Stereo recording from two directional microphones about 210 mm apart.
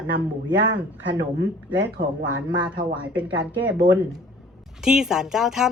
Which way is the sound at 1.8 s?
50° right (ahead or behind).